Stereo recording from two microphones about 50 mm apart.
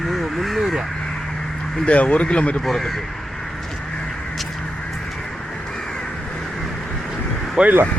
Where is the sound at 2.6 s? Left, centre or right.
Centre.